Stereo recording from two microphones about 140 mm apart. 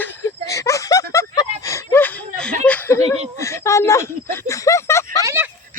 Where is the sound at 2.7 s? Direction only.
15° left (ahead or behind).